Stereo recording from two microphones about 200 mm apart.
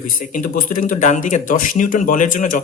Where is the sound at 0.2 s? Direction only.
40° left (ahead or behind).